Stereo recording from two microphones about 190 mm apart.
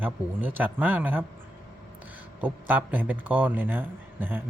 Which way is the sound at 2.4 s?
10° right (ahead or behind).